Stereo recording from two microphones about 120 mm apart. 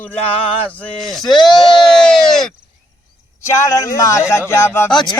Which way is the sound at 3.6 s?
25° left (ahead or behind).